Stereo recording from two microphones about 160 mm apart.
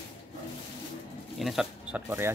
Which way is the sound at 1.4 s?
Centre (ahead or behind).